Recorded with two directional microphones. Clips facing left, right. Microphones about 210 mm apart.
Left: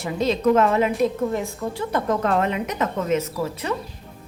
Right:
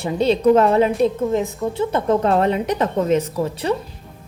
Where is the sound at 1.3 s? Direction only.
20° right (ahead or behind).